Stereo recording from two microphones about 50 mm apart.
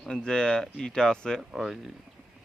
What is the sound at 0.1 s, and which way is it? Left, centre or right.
Speech, centre.